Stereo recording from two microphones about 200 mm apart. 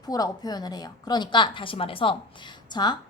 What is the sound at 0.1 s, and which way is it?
A woman's voice, 20° left (ahead or behind).